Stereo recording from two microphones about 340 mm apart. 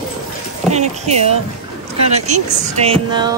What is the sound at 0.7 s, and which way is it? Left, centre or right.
Speech, centre.